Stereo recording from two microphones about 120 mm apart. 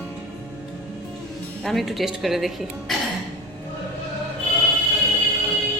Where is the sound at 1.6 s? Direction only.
Centre (ahead or behind).